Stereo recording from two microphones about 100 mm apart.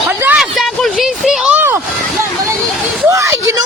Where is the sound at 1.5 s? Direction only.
25° right (ahead or behind).